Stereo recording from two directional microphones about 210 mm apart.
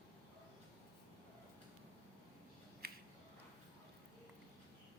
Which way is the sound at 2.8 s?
45° right (ahead or behind).